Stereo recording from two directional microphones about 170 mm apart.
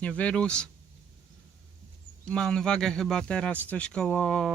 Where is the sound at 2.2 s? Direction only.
5° left (ahead or behind).